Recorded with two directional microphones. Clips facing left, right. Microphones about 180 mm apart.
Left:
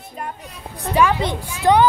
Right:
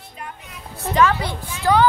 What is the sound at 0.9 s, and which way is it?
Speech, 15° left (ahead or behind).